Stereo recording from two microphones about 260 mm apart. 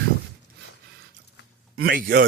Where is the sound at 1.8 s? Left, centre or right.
Right.